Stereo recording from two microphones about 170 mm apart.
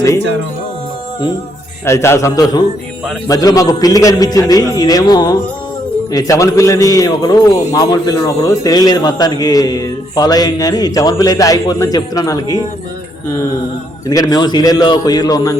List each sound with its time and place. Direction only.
1.8 s a man's voice: 15° left (ahead or behind)
14.1 s a man's voice: 20° left (ahead or behind)